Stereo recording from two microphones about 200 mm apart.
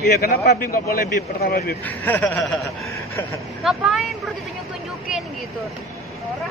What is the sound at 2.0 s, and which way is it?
Speech, 10° left (ahead or behind).